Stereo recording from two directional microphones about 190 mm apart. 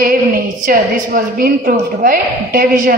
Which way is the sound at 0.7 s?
50° right (ahead or behind).